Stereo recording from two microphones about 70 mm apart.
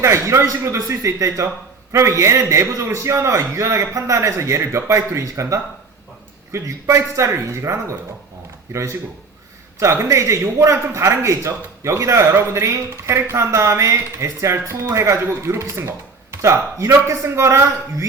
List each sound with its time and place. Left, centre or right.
0.0 s a man's voice: right